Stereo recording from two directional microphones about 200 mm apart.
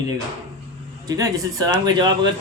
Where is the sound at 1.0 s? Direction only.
20° right (ahead or behind).